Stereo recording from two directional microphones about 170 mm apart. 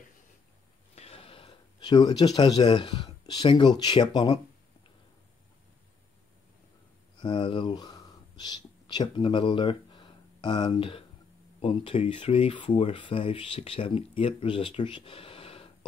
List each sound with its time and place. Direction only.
0.9 s speech: 35° left (ahead or behind)
7.2 s speech: 30° left (ahead or behind)